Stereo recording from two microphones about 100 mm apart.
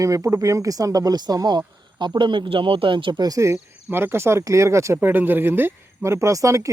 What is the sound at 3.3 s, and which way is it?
Speech, 30° right (ahead or behind).